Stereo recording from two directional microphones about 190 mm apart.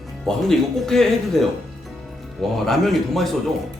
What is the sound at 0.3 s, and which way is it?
Speech, centre (ahead or behind).